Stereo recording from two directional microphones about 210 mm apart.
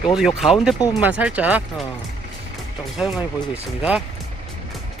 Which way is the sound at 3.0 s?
Centre (ahead or behind).